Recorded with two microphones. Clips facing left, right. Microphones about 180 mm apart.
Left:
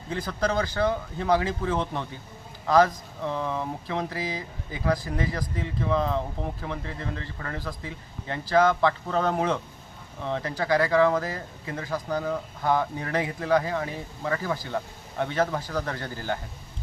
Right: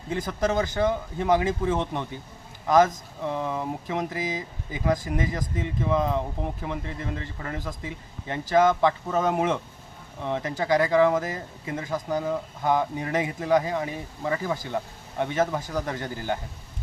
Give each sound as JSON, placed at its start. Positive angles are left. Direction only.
{"t": 0.1, "sound": "speech", "side_deg": -20}